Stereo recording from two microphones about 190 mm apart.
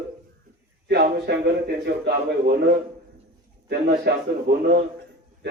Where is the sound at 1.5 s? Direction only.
55° right (ahead or behind).